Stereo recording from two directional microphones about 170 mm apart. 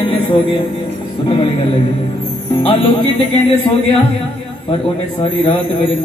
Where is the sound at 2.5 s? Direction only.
30° left (ahead or behind).